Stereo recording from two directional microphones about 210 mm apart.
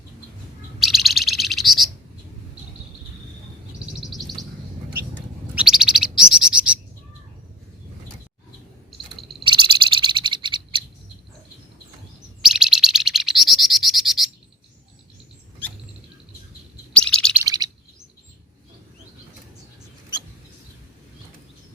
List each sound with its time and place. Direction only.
0.8 s bird: centre (ahead or behind)
3.9 s bird: centre (ahead or behind)
5.5 s bird: 5° right (ahead or behind)
9.4 s frog: 25° right (ahead or behind)
12.4 s bird: centre (ahead or behind)
16.9 s bird: 5° left (ahead or behind)
17.4 s chirp: 15° right (ahead or behind)